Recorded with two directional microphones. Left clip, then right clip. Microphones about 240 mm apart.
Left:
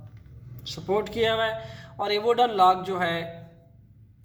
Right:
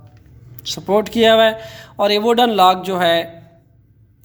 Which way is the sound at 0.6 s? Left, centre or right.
Right.